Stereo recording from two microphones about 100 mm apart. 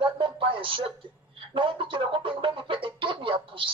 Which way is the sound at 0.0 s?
55° right (ahead or behind).